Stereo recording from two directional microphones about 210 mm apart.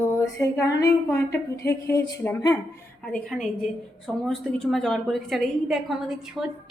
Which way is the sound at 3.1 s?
Centre (ahead or behind).